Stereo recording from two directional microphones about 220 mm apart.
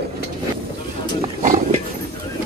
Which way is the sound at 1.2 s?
35° right (ahead or behind).